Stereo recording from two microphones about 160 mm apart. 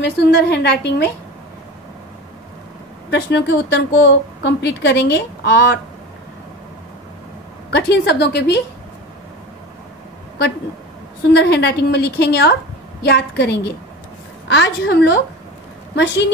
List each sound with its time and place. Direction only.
0.0 s a woman's voice: 90° left
3.1 s a woman's voice: 90° left
7.7 s a woman's voice: 90° left
11.3 s a woman's voice: 90° left